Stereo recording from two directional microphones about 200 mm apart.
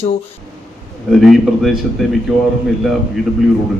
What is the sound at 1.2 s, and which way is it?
Speech, centre (ahead or behind).